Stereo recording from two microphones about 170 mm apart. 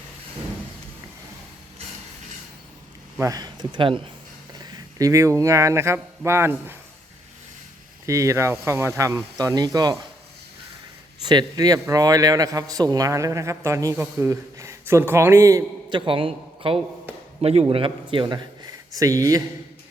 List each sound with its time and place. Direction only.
3.2 s a man's voice: 20° right (ahead or behind)
8.0 s speech: 20° right (ahead or behind)
11.3 s a man's voice: 25° right (ahead or behind)
15.9 s a man's voice: 30° right (ahead or behind)